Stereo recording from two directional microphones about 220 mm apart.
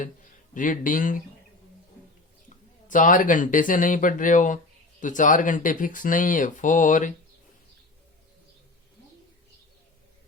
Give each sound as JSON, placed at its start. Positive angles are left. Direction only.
{"t": 0.0, "sound": "speech", "side_deg": 35}
{"t": 2.9, "sound": "speech", "side_deg": 35}